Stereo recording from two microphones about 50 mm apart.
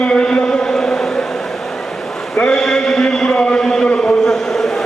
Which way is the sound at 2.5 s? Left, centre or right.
Centre.